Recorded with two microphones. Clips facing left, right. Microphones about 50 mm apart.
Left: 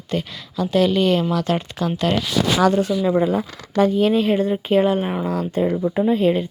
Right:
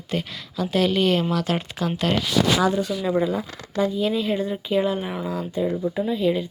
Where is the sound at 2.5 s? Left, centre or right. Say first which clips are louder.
Left 4 dB; left.